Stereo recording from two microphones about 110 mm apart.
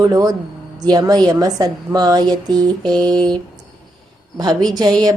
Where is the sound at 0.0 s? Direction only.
35° right (ahead or behind).